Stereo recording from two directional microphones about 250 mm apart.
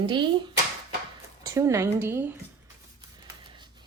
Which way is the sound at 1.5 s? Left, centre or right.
Centre.